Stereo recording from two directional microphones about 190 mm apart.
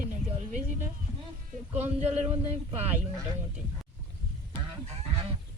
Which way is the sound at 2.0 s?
35° right (ahead or behind).